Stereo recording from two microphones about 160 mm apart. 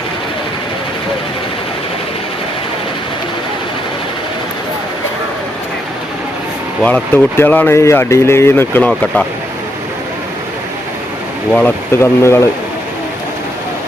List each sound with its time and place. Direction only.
6.8 s speech: 10° left (ahead or behind)
11.5 s speech: 15° left (ahead or behind)